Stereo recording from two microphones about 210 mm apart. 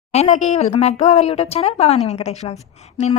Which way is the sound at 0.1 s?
30° left (ahead or behind).